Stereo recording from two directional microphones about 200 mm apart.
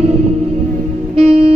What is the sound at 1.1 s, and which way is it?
Music, 30° right (ahead or behind).